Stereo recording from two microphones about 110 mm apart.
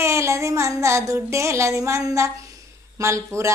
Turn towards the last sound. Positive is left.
turn(degrees=-25)  # may be behind; listen again after turning